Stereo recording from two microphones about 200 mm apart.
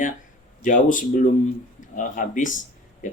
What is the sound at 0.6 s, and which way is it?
Speech, 40° left (ahead or behind).